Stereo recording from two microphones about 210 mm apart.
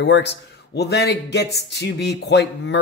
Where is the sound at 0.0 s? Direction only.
55° left (ahead or behind).